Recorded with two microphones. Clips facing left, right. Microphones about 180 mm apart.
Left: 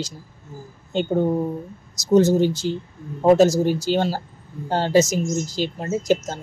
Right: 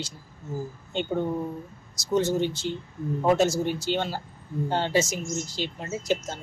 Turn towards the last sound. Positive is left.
turn(degrees=45)  # may be behind; listen again after turning